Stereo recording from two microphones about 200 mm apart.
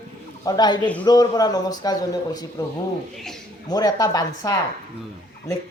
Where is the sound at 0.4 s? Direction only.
20° left (ahead or behind).